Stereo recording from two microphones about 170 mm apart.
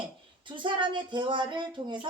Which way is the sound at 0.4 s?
30° right (ahead or behind).